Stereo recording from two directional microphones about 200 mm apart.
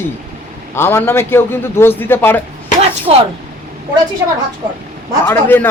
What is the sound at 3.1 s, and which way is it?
Speech, 30° right (ahead or behind).